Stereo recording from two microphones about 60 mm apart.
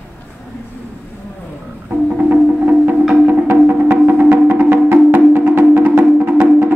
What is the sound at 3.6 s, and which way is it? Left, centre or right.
Music, right.